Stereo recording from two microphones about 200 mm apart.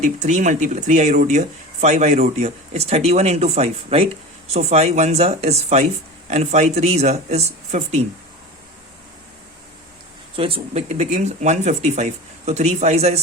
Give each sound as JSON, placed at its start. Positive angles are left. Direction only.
{"t": 0.0, "sound": "speech", "side_deg": -35}
{"t": 10.3, "sound": "speech", "side_deg": -25}